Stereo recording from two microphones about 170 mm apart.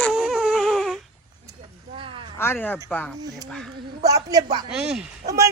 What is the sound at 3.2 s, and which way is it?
Speech, 20° right (ahead or behind).